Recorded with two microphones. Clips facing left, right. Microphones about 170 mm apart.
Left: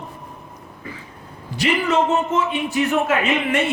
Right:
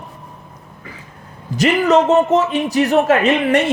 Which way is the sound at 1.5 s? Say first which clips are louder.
Right 6 dB; 45° right (ahead or behind).